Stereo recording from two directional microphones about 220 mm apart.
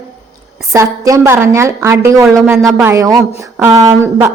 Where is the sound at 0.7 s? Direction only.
15° right (ahead or behind).